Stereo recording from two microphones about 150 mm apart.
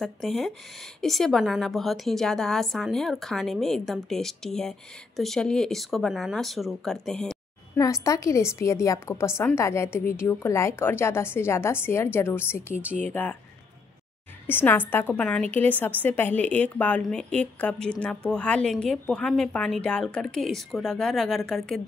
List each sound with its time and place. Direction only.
0.0 s a woman's voice: centre (ahead or behind)
7.7 s a woman's voice: 20° left (ahead or behind)
14.5 s a woman's voice: 15° left (ahead or behind)